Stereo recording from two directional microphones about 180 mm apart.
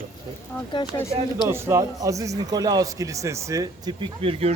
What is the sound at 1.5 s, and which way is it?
Speech, 15° right (ahead or behind).